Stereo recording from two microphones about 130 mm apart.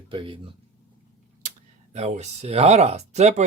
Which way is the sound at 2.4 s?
55° right (ahead or behind).